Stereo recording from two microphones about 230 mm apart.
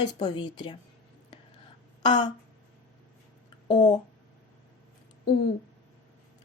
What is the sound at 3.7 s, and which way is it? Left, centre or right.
Speech, centre.